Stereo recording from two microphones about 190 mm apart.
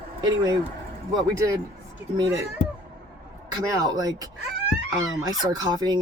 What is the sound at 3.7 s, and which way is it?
Speech, 20° right (ahead or behind).